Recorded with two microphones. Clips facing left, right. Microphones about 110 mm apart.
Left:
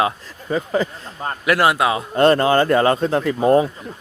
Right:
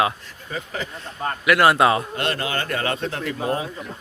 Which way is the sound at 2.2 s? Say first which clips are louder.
Left 12 dB; 40° left (ahead or behind).